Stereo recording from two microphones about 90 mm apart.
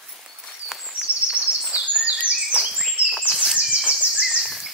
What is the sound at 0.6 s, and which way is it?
Bird, 10° right (ahead or behind).